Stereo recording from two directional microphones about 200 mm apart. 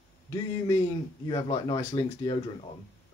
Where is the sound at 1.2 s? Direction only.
20° left (ahead or behind).